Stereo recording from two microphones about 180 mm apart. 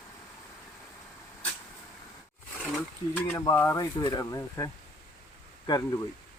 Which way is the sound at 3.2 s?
15° left (ahead or behind).